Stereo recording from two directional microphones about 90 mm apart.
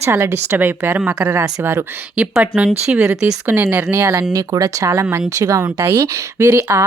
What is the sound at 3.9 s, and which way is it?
Speech, 35° right (ahead or behind).